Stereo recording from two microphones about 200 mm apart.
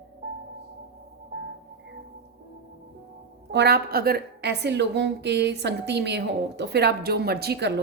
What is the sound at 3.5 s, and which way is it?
A woman's voice, 55° right (ahead or behind).